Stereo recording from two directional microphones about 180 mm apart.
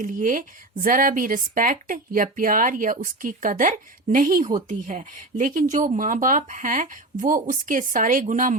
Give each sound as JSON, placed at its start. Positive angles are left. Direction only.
{"t": 0.0, "sound": "speech", "side_deg": -45}